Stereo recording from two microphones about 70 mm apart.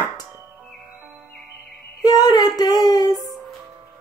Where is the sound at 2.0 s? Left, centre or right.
Left.